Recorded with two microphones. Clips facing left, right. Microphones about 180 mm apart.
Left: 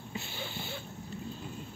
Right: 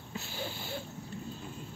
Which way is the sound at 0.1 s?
Centre (ahead or behind).